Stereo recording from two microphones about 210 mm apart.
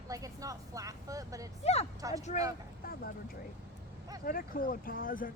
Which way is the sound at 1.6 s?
30° left (ahead or behind).